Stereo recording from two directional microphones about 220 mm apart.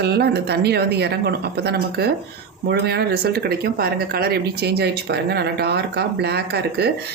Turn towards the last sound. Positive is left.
turn(degrees=-45)  # may be behind; listen again after turning